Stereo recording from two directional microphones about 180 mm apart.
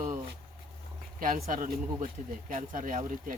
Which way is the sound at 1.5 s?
50° right (ahead or behind).